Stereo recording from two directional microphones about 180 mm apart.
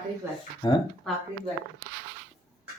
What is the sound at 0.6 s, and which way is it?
Speech, 25° left (ahead or behind).